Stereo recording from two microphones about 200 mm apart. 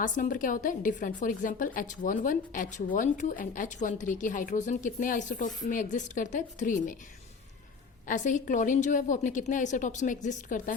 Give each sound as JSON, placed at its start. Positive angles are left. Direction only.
{"t": 0.0, "sound": "a woman's voice", "side_deg": 40}
{"t": 8.0, "sound": "a woman's voice", "side_deg": 40}